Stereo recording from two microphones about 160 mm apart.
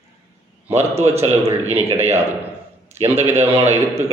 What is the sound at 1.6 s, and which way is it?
Speech, 45° right (ahead or behind).